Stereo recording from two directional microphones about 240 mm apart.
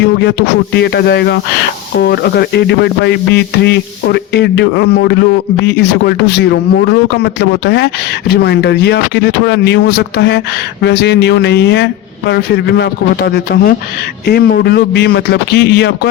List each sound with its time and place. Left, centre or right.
0.0 s speech: left